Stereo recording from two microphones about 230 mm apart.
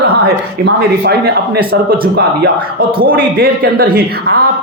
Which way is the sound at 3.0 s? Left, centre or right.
Right.